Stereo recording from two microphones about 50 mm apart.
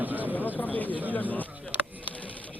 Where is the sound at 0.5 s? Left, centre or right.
Left.